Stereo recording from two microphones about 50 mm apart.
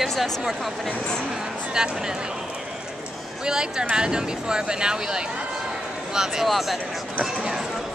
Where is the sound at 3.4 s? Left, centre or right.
Centre.